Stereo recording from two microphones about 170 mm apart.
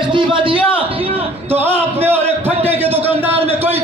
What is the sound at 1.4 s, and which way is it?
Speech, 10° right (ahead or behind).